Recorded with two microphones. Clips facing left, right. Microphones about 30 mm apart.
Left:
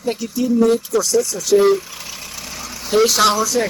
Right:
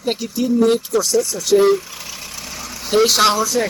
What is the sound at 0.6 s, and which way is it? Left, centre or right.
Speech, right.